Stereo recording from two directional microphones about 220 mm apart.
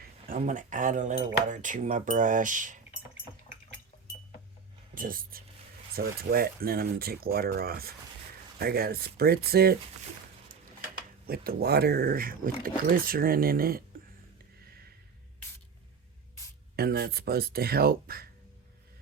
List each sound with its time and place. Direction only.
0.3 s speech: 35° right (ahead or behind)
4.9 s speech: 40° right (ahead or behind)
11.3 s speech: 45° right (ahead or behind)
16.7 s speech: 45° right (ahead or behind)